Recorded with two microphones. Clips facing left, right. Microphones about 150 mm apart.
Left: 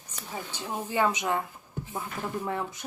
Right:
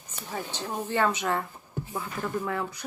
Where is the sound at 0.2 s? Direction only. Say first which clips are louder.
Right 3 dB; 5° left (ahead or behind).